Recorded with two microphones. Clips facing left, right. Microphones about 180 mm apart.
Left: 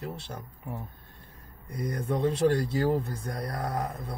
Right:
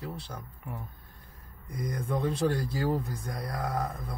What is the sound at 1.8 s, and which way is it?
Speech, 25° left (ahead or behind).